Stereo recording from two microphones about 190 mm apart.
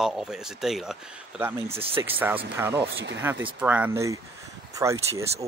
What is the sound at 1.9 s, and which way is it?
Speech, 10° right (ahead or behind).